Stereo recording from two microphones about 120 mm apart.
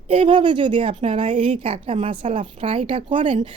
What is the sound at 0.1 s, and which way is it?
Speech, 45° right (ahead or behind).